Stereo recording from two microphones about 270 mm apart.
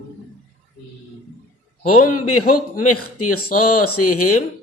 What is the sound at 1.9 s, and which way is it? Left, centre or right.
A man's voice, left.